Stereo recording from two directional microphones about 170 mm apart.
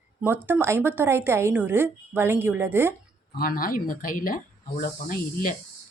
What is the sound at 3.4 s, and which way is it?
Speech, 55° left (ahead or behind).